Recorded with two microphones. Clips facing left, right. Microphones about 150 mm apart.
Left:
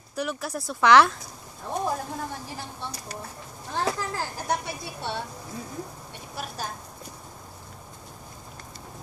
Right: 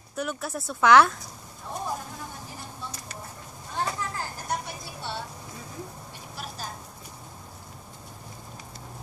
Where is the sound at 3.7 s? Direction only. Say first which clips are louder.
Left 3 dB; 85° left; by 5.2 s 65° left (ahead or behind).